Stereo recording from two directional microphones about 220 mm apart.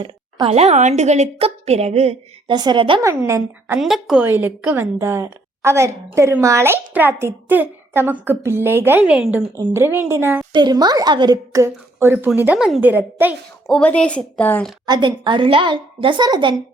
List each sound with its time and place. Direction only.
0.0 s a woman's voice: 25° right (ahead or behind)
3.8 s a woman's voice: centre (ahead or behind)
13.7 s a woman's voice: 5° left (ahead or behind)
14.8 s a woman's voice: 20° right (ahead or behind)